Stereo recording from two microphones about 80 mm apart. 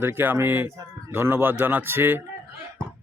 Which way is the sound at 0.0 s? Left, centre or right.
Right.